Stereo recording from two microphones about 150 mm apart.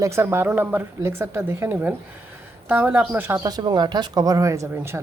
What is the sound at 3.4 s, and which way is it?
Speech, 25° right (ahead or behind).